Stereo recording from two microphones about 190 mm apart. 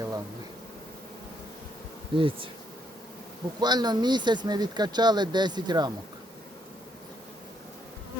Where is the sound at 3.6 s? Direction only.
20° right (ahead or behind).